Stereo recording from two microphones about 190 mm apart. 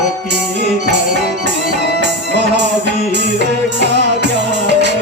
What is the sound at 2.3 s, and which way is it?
Music, 65° right (ahead or behind).